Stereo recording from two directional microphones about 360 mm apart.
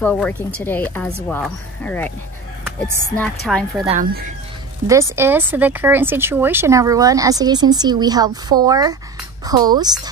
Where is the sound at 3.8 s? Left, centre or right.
Right.